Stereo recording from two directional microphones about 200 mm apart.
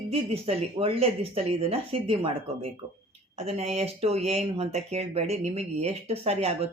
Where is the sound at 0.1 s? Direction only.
30° right (ahead or behind).